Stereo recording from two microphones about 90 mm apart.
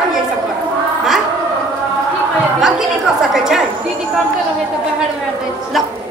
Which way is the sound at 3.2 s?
5° right (ahead or behind).